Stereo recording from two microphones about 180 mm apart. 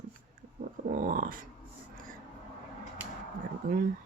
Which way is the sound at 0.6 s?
50° right (ahead or behind).